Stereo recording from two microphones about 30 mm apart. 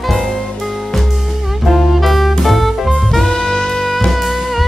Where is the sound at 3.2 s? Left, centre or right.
Left.